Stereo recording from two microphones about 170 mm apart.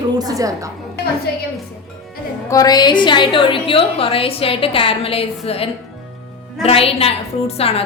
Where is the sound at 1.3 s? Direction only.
65° left (ahead or behind).